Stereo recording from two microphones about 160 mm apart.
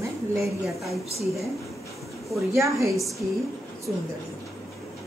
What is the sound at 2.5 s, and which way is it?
Speech, 20° right (ahead or behind).